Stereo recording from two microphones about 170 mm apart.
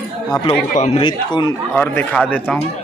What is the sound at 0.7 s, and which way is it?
Speech, 40° left (ahead or behind).